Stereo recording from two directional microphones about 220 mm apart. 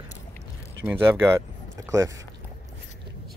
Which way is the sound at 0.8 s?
10° right (ahead or behind).